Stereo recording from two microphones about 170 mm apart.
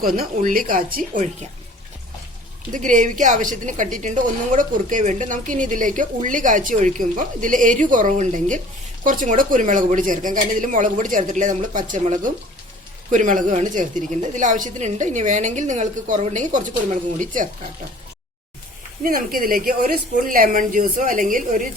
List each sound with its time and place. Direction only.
0.0 s speech: 55° right (ahead or behind)
2.7 s a woman's voice: 50° right (ahead or behind)
19.0 s a woman's voice: 55° right (ahead or behind)